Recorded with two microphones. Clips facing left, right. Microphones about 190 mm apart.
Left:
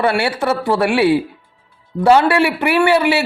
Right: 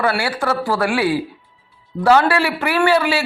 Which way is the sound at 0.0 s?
25° left (ahead or behind).